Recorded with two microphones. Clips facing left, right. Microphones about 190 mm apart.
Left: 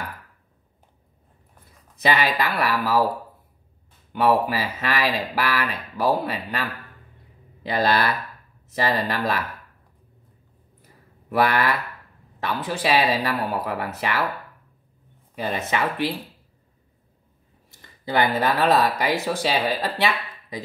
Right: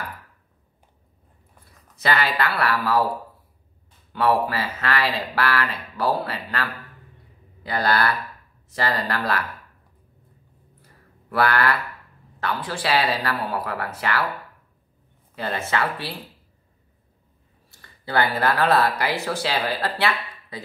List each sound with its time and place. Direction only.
2.0 s speech: 15° left (ahead or behind)
4.1 s speech: 15° left (ahead or behind)
11.2 s speech: 20° left (ahead or behind)
15.3 s speech: 15° left (ahead or behind)
17.6 s speech: 20° left (ahead or behind)